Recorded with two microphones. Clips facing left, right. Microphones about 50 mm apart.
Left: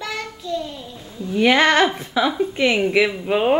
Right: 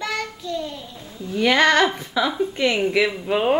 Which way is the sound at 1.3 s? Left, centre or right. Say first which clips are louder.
Left 1 dB; centre.